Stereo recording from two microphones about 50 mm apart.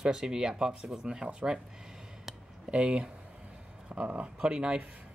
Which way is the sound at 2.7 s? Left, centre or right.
Right.